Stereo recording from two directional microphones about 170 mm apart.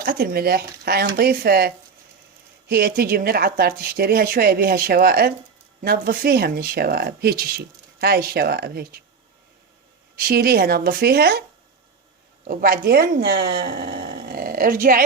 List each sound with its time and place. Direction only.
0.0 s speech: 65° right (ahead or behind)
10.2 s speech: 65° right (ahead or behind)
12.5 s speech: 55° right (ahead or behind)